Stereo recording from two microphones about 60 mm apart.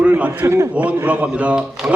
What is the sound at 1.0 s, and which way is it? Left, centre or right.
Speech, right.